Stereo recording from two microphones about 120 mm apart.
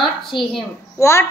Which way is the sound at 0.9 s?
25° left (ahead or behind).